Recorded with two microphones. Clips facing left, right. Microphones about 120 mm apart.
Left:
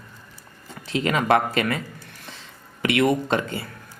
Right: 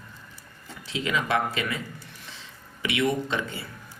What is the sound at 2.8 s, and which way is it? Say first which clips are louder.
Speech: left 5 dB; 55° left (ahead or behind).